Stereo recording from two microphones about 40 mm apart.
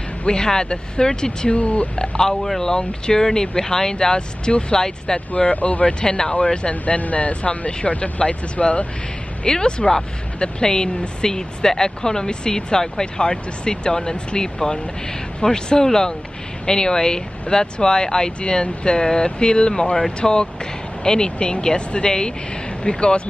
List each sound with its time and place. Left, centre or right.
0.2 s speech: left
1.5 s speech: left
2.0 s speech: centre
5.3 s speech: left
5.9 s speech: centre
6.7 s speech: left
9.4 s speech: left